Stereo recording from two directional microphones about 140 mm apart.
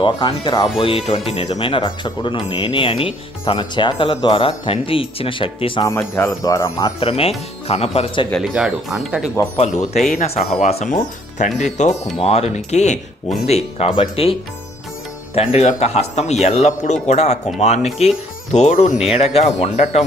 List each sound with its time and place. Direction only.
0.0 s speech: 35° left (ahead or behind)
5.8 s speech: 20° left (ahead or behind)
7.0 s a man's voice: 45° left (ahead or behind)
8.3 s speech: centre (ahead or behind)
9.6 s a man's voice: 50° left (ahead or behind)
10.9 s speech: 65° left (ahead or behind)
13.7 s a man's voice: 40° left (ahead or behind)
15.4 s a man's voice: 50° left (ahead or behind)